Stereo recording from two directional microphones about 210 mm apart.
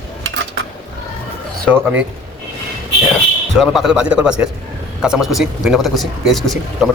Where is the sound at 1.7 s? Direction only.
10° right (ahead or behind).